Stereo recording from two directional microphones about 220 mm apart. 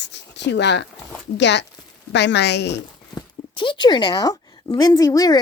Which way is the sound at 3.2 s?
20° left (ahead or behind).